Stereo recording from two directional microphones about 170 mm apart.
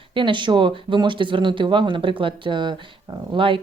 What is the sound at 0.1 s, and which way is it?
Speech, 30° right (ahead or behind).